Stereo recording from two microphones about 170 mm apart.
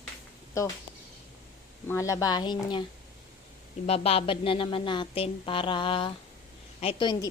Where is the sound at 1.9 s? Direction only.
20° left (ahead or behind).